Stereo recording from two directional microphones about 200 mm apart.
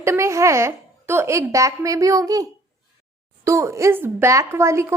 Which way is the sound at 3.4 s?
15° right (ahead or behind).